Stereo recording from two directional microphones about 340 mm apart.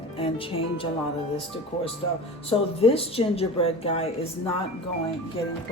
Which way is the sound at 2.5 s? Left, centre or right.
Centre.